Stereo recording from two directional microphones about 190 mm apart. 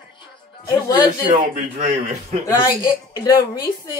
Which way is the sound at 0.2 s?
20° left (ahead or behind).